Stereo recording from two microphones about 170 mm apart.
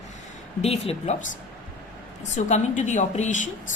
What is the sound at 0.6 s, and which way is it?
A woman's voice, 35° left (ahead or behind).